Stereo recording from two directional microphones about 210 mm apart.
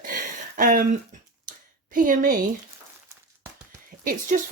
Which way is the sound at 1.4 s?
40° right (ahead or behind).